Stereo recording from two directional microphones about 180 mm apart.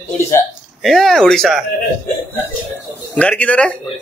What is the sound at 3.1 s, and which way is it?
Speech, 5° left (ahead or behind).